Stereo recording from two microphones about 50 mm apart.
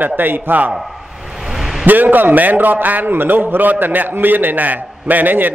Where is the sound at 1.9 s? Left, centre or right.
Right.